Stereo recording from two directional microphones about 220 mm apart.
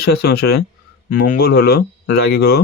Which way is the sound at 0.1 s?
45° left (ahead or behind).